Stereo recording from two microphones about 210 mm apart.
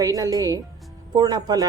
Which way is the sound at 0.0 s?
15° right (ahead or behind).